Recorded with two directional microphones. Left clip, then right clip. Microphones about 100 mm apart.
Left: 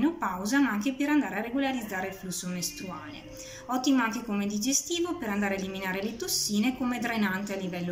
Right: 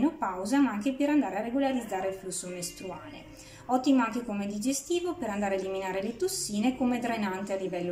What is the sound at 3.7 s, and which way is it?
A woman's voice, 45° right (ahead or behind).